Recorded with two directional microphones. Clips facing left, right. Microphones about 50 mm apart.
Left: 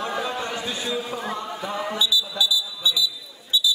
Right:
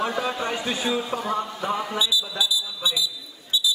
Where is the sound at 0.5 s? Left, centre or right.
Right.